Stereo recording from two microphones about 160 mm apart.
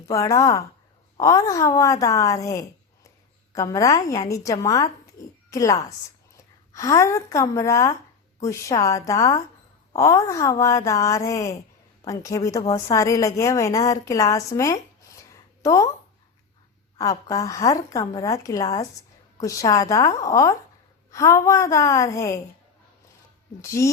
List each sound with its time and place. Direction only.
0.0 s a woman's voice: 20° left (ahead or behind)
15.3 s a sound: 20° left (ahead or behind)
17.0 s a woman's voice: 20° left (ahead or behind)
23.6 s a woman's voice: 20° left (ahead or behind)